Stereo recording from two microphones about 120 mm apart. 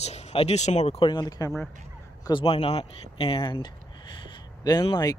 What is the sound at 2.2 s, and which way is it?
Speech, 45° left (ahead or behind).